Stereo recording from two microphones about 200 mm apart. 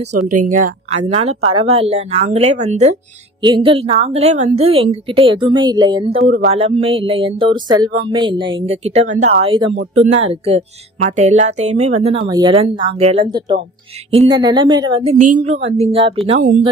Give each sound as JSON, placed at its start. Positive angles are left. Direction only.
{"t": 0.5, "sound": "speech", "side_deg": -40}
{"t": 3.4, "sound": "speech", "side_deg": -25}
{"t": 12.3, "sound": "speech", "side_deg": -20}